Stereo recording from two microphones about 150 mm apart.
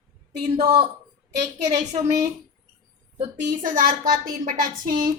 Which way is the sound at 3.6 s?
65° right (ahead or behind).